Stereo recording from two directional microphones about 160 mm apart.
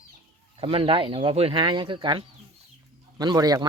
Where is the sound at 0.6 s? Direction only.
35° right (ahead or behind).